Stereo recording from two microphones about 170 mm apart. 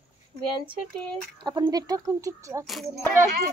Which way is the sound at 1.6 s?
20° right (ahead or behind).